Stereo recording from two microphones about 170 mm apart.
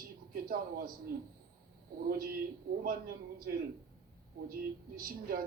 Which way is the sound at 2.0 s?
60° right (ahead or behind).